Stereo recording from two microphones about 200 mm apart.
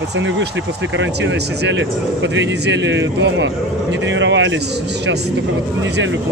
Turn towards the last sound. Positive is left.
turn(degrees=-70)  # may be behind; listen again after turning